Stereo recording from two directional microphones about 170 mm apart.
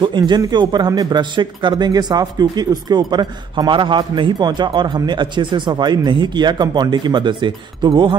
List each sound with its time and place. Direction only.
0.3 s speech: 25° right (ahead or behind)